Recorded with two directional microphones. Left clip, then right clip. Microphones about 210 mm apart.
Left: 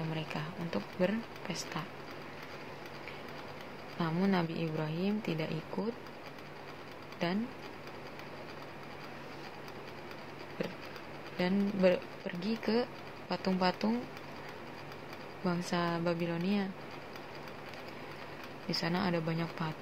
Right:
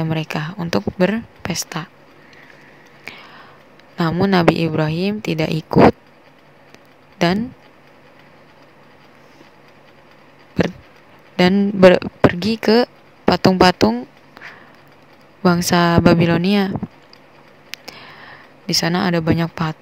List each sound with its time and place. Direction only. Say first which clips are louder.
0.1 s speech: right 15 dB; 50° right (ahead or behind)
3.1 s a sound: right 15 dB; 50° right (ahead or behind)
4.0 s speech: right 18 dB; 50° right (ahead or behind)
7.2 s speech: right 18 dB; 55° right (ahead or behind)
11.3 s speech: right 18 dB; 50° right (ahead or behind)
15.4 s speech: right 19 dB; 50° right (ahead or behind)
18.7 s speech: right 15 dB; 50° right (ahead or behind)